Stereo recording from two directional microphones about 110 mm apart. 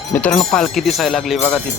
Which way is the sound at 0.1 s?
10° left (ahead or behind).